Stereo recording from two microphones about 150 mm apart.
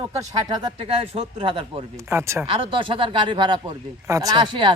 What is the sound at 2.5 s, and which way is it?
A man's voice, 35° right (ahead or behind).